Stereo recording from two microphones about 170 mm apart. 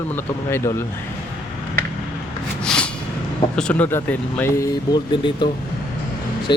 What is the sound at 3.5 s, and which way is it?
Speech, 5° left (ahead or behind).